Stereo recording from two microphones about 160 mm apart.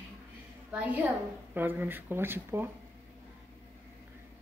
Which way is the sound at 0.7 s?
10° right (ahead or behind).